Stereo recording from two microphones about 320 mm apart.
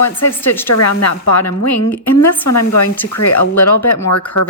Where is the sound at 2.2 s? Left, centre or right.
Left.